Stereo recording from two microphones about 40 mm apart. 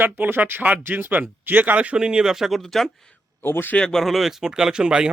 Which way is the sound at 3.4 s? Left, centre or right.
Left.